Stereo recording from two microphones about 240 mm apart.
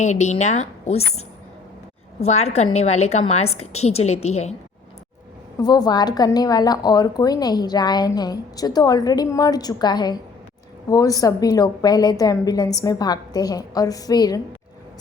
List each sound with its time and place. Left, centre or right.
0.0 s a woman's voice: left
2.2 s a woman's voice: left
5.5 s a woman's voice: centre